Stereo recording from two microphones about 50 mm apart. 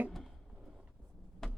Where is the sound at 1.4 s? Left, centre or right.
Centre.